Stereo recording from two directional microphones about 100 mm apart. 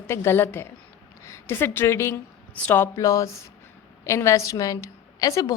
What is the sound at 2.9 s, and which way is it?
A woman's voice, 35° left (ahead or behind).